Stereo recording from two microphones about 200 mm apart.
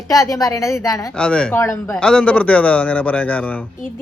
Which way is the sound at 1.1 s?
5° left (ahead or behind).